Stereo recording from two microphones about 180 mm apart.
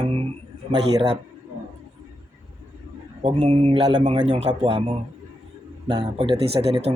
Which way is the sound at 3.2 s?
35° right (ahead or behind).